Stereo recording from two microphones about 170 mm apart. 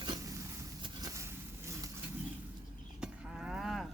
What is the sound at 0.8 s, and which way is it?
Vehicle, 20° right (ahead or behind).